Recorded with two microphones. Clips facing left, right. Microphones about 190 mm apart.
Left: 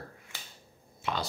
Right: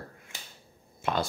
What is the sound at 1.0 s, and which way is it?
Speech, 50° right (ahead or behind).